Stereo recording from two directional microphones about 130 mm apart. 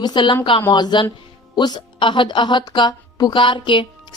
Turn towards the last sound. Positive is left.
turn(degrees=40)  # may be behind; listen again after turning